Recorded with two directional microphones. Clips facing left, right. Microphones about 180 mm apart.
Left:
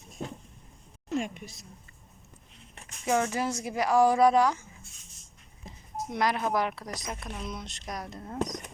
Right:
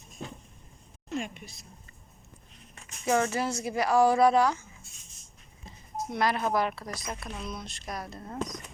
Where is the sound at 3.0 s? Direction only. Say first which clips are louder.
Right 1 dB; 15° left (ahead or behind).